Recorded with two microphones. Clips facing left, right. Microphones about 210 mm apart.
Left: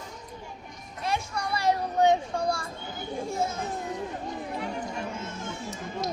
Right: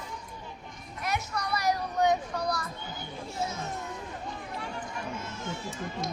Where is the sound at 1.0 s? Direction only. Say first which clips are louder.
Left 2 dB; 30° left (ahead or behind).